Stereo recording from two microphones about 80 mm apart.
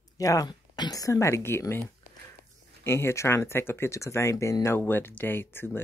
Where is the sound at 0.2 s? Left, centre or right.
Left.